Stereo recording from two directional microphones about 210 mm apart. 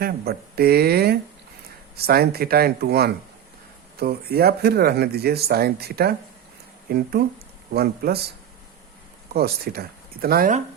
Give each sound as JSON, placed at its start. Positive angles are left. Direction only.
{"t": 0.0, "sound": "speech", "side_deg": -45}
{"t": 9.3, "sound": "speech", "side_deg": -45}